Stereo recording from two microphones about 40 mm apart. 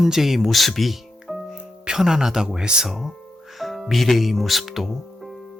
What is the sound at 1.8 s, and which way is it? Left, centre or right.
Speech, centre.